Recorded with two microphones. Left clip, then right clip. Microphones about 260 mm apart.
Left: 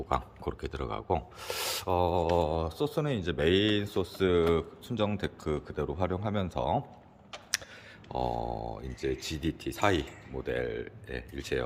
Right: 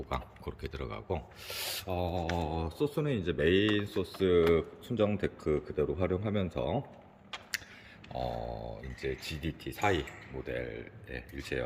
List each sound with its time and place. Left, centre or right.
0.1 s speech: centre
8.1 s speech: centre